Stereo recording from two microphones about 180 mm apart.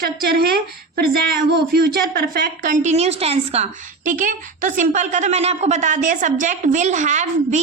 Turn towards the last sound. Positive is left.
turn(degrees=-40)  # may be behind; listen again after turning